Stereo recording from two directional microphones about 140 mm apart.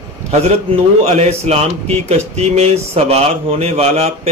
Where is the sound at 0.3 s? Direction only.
50° right (ahead or behind).